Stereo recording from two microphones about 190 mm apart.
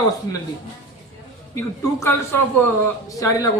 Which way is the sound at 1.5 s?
15° left (ahead or behind).